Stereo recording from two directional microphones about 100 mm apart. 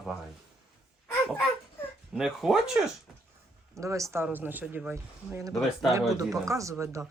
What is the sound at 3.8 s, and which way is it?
Speech, 30° right (ahead or behind).